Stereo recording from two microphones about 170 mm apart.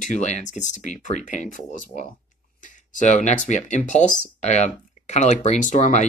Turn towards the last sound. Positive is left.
turn(degrees=45)  # may be behind; listen again after turning